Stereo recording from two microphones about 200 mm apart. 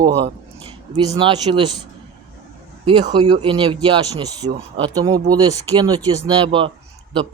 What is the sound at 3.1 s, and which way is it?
Speech, 25° right (ahead or behind).